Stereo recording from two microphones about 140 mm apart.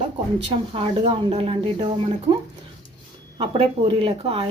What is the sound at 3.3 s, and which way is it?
Speech, 35° right (ahead or behind).